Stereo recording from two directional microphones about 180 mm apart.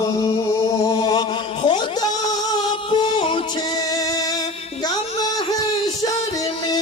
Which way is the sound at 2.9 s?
30° left (ahead or behind).